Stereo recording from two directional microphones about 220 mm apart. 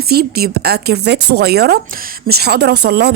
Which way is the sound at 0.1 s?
45° right (ahead or behind).